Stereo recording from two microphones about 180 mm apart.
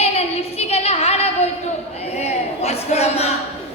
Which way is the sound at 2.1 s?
35° left (ahead or behind).